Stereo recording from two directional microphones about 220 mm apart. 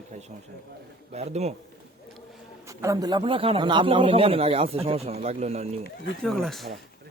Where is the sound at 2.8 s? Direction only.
15° right (ahead or behind).